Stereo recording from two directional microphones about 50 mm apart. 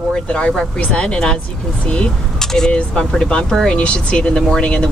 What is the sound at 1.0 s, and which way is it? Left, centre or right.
Speech, centre.